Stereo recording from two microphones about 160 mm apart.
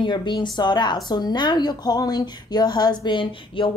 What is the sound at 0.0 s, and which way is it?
A woman's voice, 30° left (ahead or behind).